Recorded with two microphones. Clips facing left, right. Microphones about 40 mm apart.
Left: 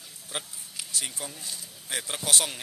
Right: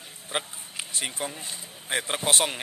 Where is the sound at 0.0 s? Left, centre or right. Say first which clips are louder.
Right 6 dB; right.